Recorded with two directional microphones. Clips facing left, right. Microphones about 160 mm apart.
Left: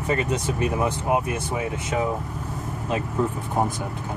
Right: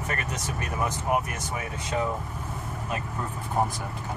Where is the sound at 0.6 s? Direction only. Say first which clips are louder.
Left 4 dB; 20° left (ahead or behind).